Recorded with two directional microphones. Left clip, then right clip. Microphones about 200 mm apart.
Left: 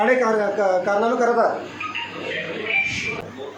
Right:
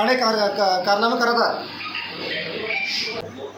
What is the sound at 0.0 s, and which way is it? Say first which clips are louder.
Speech: left 1 dB; 40° right (ahead or behind).